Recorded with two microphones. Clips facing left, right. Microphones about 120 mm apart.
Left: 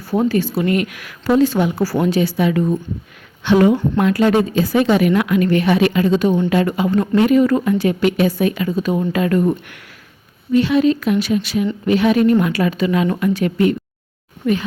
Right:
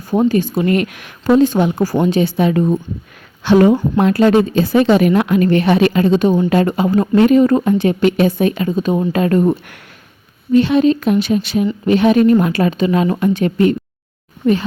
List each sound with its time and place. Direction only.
0.0 s speech: 15° right (ahead or behind)
0.6 s a woman's voice: 30° right (ahead or behind)
9.1 s a woman's voice: 35° right (ahead or behind)